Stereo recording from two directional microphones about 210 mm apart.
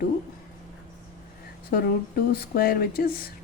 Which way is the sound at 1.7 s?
45° left (ahead or behind).